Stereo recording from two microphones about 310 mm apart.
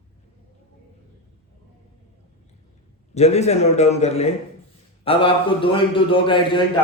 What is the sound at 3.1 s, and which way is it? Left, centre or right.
A man's voice, left.